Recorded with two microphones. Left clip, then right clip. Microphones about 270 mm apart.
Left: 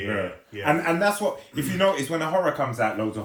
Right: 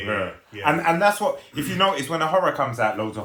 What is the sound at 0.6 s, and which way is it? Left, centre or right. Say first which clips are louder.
Speech: right 3 dB; centre.